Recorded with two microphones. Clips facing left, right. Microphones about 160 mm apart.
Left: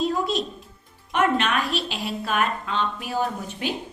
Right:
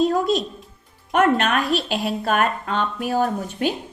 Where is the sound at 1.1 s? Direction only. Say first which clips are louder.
Right 4 dB; 50° right (ahead or behind).